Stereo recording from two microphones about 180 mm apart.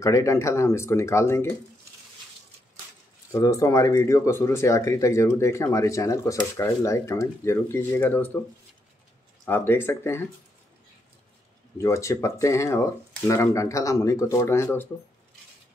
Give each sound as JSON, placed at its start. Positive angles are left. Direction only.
{"t": 0.0, "sound": "speech", "side_deg": 15}
{"t": 3.3, "sound": "speech", "side_deg": 20}
{"t": 9.5, "sound": "speech", "side_deg": 10}
{"t": 11.8, "sound": "speech", "side_deg": 15}